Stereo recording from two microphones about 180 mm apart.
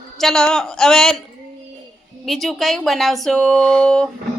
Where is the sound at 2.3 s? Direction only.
Centre (ahead or behind).